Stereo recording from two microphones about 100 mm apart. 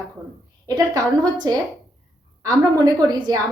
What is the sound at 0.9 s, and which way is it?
A woman's voice, 40° right (ahead or behind).